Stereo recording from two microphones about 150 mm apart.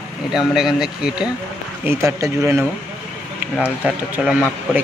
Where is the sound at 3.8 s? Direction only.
5° right (ahead or behind).